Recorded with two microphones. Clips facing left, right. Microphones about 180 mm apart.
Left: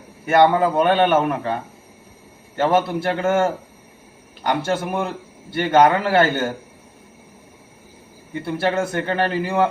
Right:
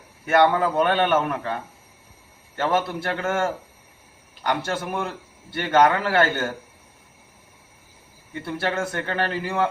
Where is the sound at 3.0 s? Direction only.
15° left (ahead or behind).